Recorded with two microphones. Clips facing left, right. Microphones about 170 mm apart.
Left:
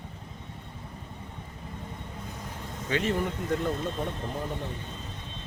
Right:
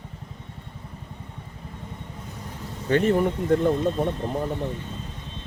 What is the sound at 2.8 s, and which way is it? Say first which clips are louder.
Speech: right 8 dB; 55° right (ahead or behind).